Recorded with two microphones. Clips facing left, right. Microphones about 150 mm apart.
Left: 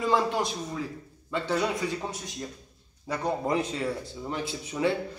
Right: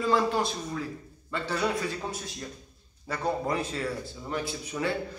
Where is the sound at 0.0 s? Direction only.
20° left (ahead or behind).